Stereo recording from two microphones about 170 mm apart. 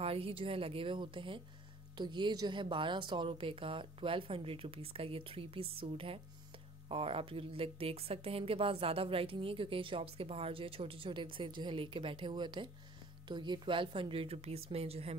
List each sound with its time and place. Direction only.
0.0 s a woman's voice: 35° right (ahead or behind)